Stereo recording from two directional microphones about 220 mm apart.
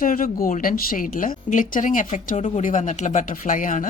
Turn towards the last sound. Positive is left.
turn(degrees=35)  # may be behind; listen again after turning